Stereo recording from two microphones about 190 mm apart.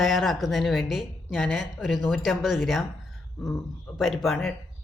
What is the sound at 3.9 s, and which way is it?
Speech, centre (ahead or behind).